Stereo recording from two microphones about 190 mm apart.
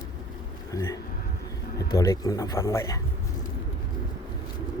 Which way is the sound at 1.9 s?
15° left (ahead or behind).